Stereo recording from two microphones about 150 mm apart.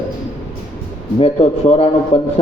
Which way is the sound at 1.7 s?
40° left (ahead or behind).